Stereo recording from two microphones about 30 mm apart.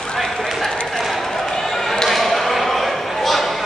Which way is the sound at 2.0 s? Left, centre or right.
Centre.